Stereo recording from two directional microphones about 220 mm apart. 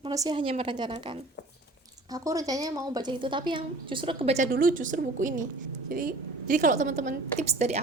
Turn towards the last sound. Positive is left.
turn(degrees=-30)  # may be behind; listen again after turning